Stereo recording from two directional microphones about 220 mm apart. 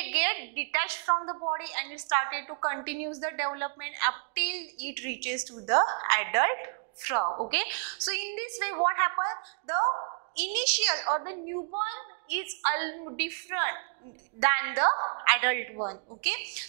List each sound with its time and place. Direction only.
0.0 s a sound: 10° right (ahead or behind)
1.2 s a woman's voice: 25° right (ahead or behind)
1.6 s a woman's voice: 10° right (ahead or behind)
10.3 s a woman's voice: 10° right (ahead or behind)